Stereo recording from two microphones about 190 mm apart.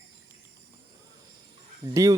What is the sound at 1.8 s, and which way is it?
Speech, 15° right (ahead or behind).